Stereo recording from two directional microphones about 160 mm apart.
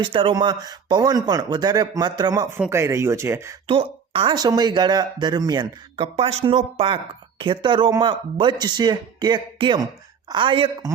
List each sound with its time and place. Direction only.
0.0 s speech: 30° right (ahead or behind); by 3.5 s 15° right (ahead or behind)
3.7 s speech: 35° right (ahead or behind)